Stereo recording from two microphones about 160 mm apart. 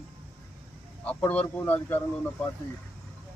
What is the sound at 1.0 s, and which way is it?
Speech, 10° left (ahead or behind).